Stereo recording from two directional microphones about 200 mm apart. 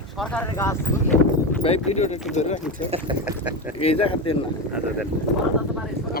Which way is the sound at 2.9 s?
30° right (ahead or behind).